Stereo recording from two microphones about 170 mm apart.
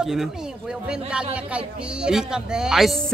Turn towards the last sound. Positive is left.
turn(degrees=0)  # may be behind; listen again after turning